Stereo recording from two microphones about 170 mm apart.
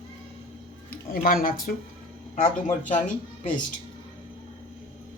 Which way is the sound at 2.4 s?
50° left (ahead or behind).